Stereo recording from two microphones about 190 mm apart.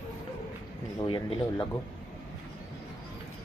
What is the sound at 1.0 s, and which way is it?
Speech, 25° left (ahead or behind).